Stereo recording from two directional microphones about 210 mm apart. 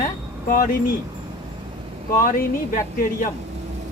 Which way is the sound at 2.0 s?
40° left (ahead or behind).